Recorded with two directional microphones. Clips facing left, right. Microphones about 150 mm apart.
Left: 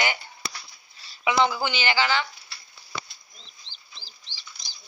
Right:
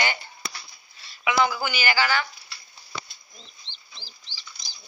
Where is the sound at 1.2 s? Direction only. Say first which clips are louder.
Left 1 dB; 25° left (ahead or behind).